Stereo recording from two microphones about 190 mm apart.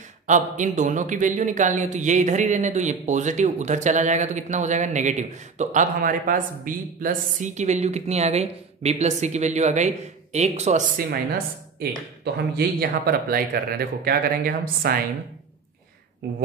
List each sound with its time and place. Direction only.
0.3 s a man's voice: 40° right (ahead or behind)
11.0 s speech: 50° right (ahead or behind)
16.2 s speech: 50° right (ahead or behind)